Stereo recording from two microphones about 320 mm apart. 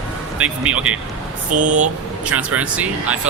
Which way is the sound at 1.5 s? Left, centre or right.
Right.